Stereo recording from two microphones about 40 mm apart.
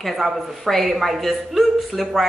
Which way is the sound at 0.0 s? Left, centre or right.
Centre.